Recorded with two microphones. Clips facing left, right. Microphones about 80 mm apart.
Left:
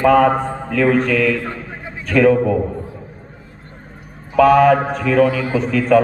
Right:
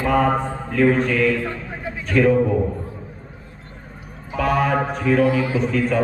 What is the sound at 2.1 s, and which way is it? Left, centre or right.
Speech, left.